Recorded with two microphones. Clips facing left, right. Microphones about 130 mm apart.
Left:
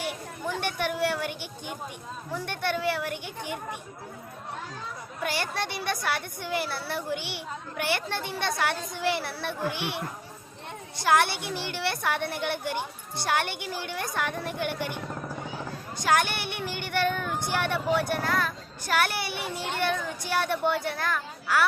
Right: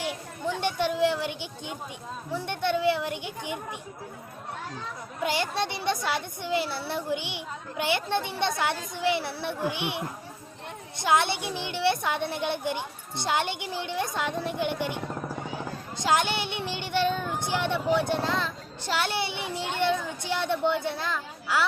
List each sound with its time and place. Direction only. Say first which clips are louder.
0.6 s speech: right 4 dB; 20° right (ahead or behind)
5.2 s a child's voice: right 3 dB; 20° right (ahead or behind)
11.0 s speech: left 1 dB; 20° right (ahead or behind)
16.0 s speech: even; 20° right (ahead or behind)